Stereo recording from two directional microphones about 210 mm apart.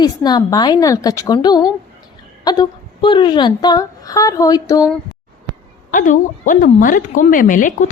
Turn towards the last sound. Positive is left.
turn(degrees=40)  # may be behind; listen again after turning